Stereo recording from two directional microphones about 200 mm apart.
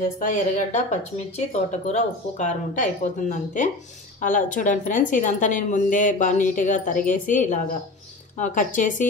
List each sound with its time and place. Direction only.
0.2 s speech: 40° left (ahead or behind)